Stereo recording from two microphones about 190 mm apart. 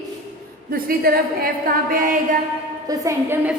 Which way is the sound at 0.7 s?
50° right (ahead or behind).